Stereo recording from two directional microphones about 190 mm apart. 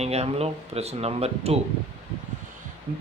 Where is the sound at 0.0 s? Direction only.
35° right (ahead or behind).